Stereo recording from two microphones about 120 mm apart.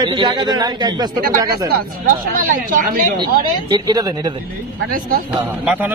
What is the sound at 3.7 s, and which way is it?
Speech, 35° right (ahead or behind).